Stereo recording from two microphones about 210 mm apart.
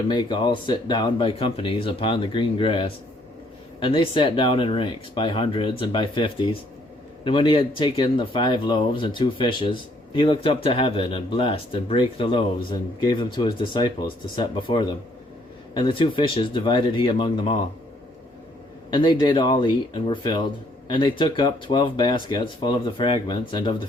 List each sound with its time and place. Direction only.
0.1 s speech: 20° left (ahead or behind)
18.9 s speech: 20° left (ahead or behind)